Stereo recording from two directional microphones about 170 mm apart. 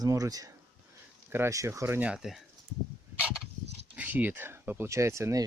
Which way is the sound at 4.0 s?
10° right (ahead or behind).